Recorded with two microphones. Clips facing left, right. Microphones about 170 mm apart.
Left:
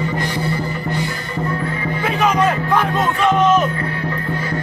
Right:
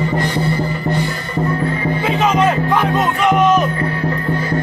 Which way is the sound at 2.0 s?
25° right (ahead or behind).